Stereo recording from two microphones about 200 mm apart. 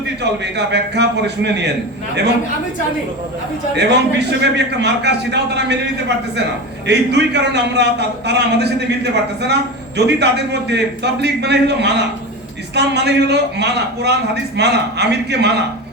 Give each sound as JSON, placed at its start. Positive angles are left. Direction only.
{"t": 0.2, "sound": "a man's voice", "side_deg": -60}
{"t": 3.8, "sound": "a man's voice", "side_deg": -60}
{"t": 10.0, "sound": "a man's voice", "side_deg": -60}